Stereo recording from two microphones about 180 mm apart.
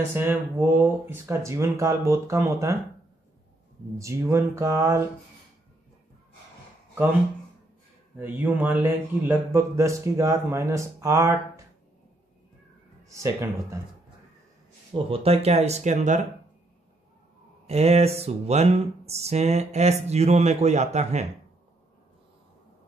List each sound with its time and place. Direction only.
0.1 s speech: 10° right (ahead or behind)
4.0 s speech: 15° right (ahead or behind)
8.2 s speech: 10° right (ahead or behind)
13.1 s speech: 15° right (ahead or behind)
15.0 s a sound: 35° right (ahead or behind)
17.6 s a sound: 35° right (ahead or behind)